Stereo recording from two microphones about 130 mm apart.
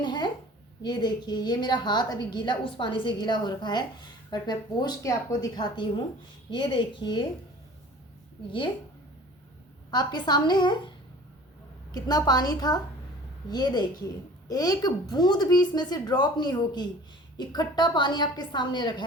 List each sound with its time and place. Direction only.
0.0 s a sound: 35° left (ahead or behind)
0.8 s a woman's voice: 35° left (ahead or behind)
9.9 s a woman's voice: 35° left (ahead or behind)
11.9 s a woman's voice: 30° left (ahead or behind)